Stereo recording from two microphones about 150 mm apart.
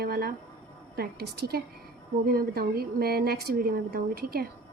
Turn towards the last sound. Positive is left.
turn(degrees=-90)